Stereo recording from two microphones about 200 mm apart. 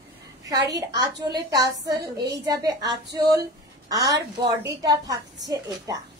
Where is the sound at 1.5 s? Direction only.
20° right (ahead or behind).